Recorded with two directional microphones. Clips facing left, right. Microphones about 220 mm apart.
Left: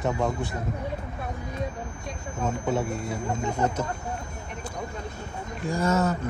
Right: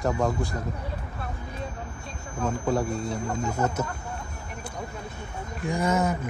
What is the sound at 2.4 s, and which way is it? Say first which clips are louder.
Speech: right 1 dB; 5° left (ahead or behind).